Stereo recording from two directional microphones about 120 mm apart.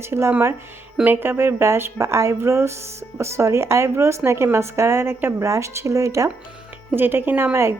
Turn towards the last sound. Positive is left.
turn(degrees=-20)  # may be behind; listen again after turning